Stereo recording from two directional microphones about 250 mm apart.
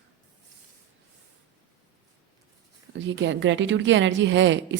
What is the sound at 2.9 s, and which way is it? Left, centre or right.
A woman's voice, right.